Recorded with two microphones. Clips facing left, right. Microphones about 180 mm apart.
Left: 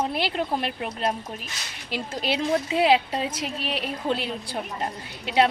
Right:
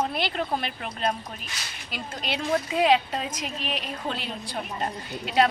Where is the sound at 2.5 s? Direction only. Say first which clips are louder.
Even; 30° left (ahead or behind).